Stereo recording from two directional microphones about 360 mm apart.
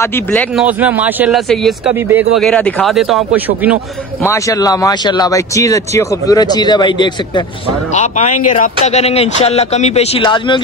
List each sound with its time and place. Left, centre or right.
0.0 s speech: centre
4.2 s speech: centre